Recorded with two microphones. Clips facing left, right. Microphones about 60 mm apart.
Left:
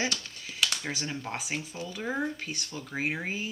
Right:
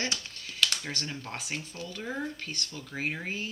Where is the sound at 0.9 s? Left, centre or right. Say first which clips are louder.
Left 3 dB; centre.